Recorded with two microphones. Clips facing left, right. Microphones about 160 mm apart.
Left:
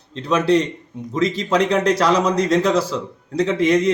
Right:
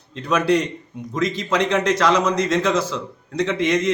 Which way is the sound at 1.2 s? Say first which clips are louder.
Left 3 dB; 30° left (ahead or behind).